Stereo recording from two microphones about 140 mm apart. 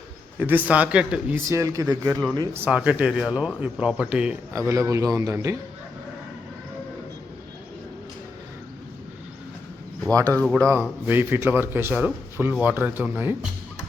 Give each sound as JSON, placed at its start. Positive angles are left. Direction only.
{"t": 0.3, "sound": "a man's voice", "side_deg": -15}
{"t": 1.5, "sound": "a man's voice", "side_deg": -20}
{"t": 2.6, "sound": "a man's voice", "side_deg": -10}
{"t": 4.5, "sound": "a man's voice", "side_deg": -20}
{"t": 10.1, "sound": "a man's voice", "side_deg": -25}
{"t": 10.7, "sound": "a man's voice", "side_deg": -15}